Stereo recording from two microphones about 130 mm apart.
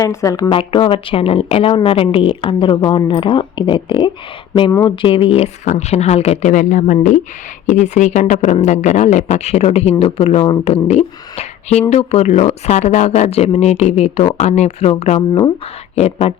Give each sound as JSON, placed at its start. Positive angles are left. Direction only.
{"t": 0.0, "sound": "speech", "side_deg": 25}